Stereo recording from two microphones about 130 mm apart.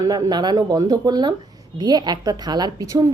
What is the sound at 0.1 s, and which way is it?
A woman's voice, 35° right (ahead or behind).